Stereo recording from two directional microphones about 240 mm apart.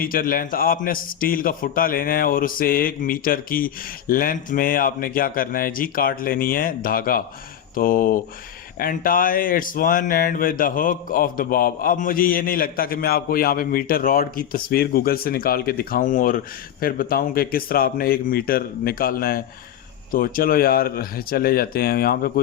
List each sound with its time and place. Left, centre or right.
0.0 s speech: left